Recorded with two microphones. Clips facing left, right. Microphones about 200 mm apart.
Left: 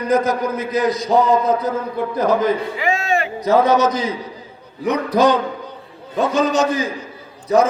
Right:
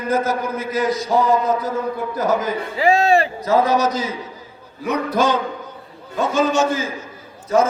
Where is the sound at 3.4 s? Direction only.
20° left (ahead or behind).